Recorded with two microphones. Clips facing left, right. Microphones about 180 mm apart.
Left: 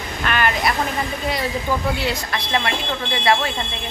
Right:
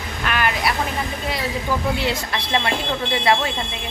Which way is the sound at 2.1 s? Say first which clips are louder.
Even; 25° right (ahead or behind).